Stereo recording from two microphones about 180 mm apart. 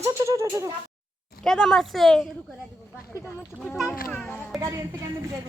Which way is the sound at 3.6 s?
10° left (ahead or behind).